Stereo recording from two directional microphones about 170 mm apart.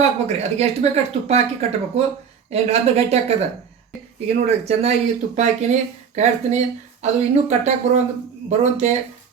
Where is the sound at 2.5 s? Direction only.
40° right (ahead or behind).